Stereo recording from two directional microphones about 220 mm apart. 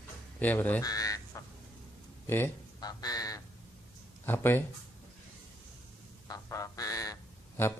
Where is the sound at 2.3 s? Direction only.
15° left (ahead or behind).